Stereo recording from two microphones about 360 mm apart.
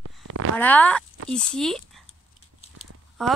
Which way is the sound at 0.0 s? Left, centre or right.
Right.